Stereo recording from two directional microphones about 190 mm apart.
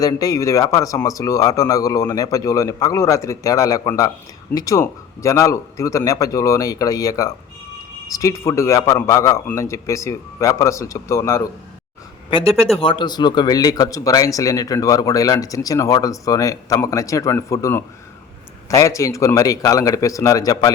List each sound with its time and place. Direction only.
0.0 s speech: 20° left (ahead or behind)
12.8 s speech: 25° left (ahead or behind)